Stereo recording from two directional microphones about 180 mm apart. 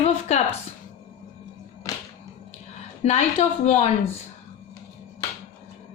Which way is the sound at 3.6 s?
35° left (ahead or behind).